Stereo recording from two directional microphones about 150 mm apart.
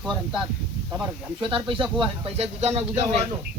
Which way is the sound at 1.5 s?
35° right (ahead or behind).